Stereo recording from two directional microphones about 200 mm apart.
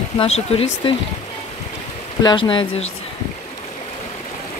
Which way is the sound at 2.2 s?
25° left (ahead or behind).